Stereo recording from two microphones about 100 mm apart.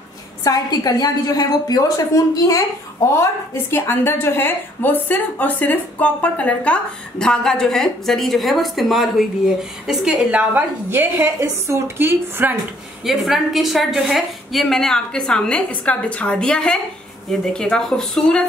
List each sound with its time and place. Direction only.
0.4 s a woman's voice: 40° left (ahead or behind)
3.7 s a woman's voice: 25° left (ahead or behind); by 12.5 s 25° right (ahead or behind)
13.0 s a woman's voice: centre (ahead or behind)